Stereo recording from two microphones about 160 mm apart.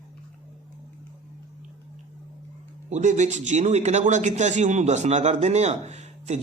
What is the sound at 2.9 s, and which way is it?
A man's voice, 45° right (ahead or behind).